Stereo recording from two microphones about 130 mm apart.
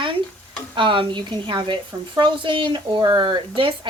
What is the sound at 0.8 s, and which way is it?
A woman's voice, 40° right (ahead or behind).